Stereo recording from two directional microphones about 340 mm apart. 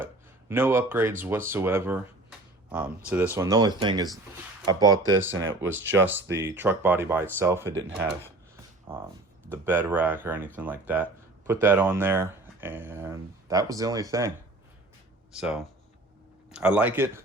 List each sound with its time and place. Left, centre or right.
0.0 s a sound: centre
1.5 s speech: centre
5.6 s speech: right
5.9 s speech: centre
7.7 s speech: right
8.9 s speech: centre